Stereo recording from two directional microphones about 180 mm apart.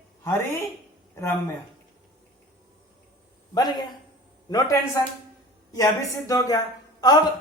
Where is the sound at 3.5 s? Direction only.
20° left (ahead or behind).